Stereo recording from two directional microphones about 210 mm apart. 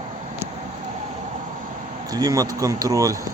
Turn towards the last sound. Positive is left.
turn(degrees=-15)  # may be behind; listen again after turning